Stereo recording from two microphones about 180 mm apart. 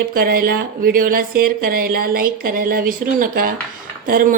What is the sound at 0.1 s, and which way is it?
A woman's voice, 55° right (ahead or behind).